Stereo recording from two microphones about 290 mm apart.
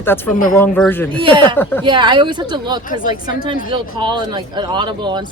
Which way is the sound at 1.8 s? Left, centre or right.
Centre.